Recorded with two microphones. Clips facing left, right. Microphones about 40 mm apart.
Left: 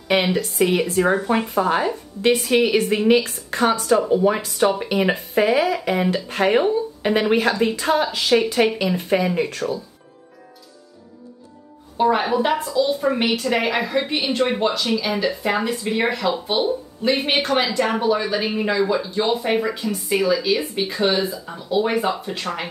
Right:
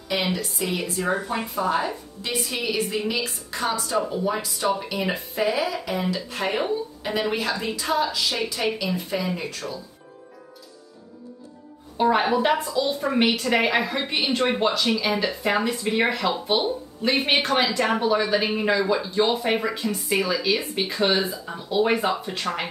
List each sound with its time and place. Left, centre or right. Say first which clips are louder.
0.1 s speech: left 6 dB; left
12.0 s a woman's voice: left 2 dB; centre